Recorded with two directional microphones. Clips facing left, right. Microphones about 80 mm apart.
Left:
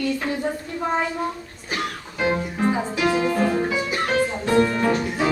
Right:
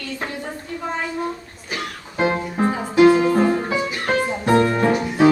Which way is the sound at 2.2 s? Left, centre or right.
Right.